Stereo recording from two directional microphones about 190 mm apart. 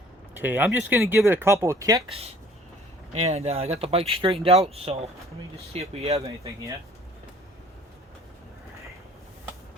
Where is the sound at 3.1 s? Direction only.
35° right (ahead or behind).